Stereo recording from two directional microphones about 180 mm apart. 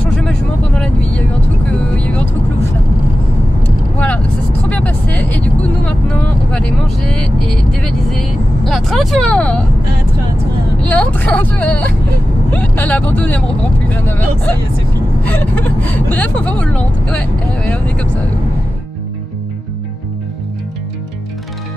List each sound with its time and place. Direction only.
0.1 s vehicle: 5° left (ahead or behind)
4.6 s vehicle: 5° left (ahead or behind)
10.8 s speech: 5° left (ahead or behind)